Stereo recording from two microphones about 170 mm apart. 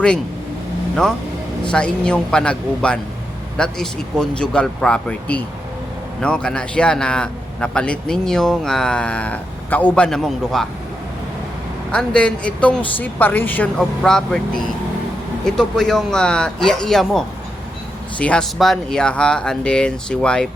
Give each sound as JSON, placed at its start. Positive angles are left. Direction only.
{"t": 1.7, "sound": "a man's voice", "side_deg": 5}
{"t": 11.9, "sound": "speech", "side_deg": 5}
{"t": 15.4, "sound": "a man's voice", "side_deg": 5}